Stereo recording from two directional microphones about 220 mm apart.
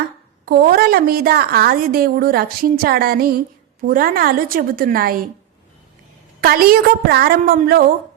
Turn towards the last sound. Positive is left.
turn(degrees=-40)  # may be behind; listen again after turning